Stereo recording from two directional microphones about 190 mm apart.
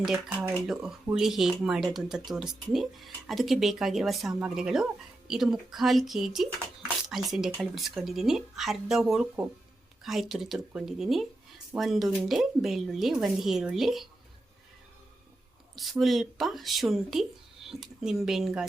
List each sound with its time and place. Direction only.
0.0 s speech: 5° right (ahead or behind)
15.7 s speech: centre (ahead or behind)